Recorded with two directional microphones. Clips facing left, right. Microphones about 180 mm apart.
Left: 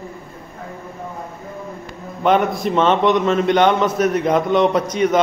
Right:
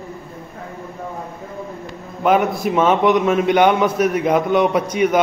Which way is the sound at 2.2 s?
5° right (ahead or behind).